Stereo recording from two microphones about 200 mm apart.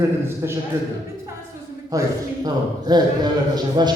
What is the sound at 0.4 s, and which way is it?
Speech, 15° right (ahead or behind).